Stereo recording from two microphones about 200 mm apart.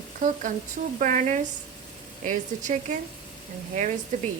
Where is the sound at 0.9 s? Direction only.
40° right (ahead or behind).